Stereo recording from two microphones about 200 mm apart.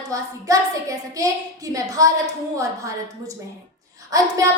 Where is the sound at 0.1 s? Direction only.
15° right (ahead or behind).